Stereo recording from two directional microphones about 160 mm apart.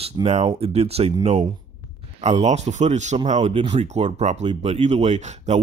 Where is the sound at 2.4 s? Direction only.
45° right (ahead or behind).